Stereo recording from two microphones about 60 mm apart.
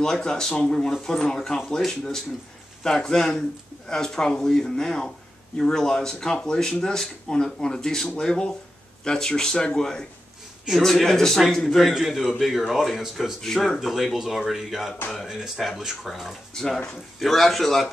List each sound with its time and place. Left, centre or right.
0.0 s speech: centre
2.8 s speech: centre
16.5 s speech: centre